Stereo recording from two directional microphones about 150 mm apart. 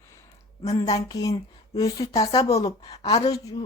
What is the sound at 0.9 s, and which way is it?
A woman's voice, 25° left (ahead or behind).